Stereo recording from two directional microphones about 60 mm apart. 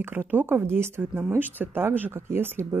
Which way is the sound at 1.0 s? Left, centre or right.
Right.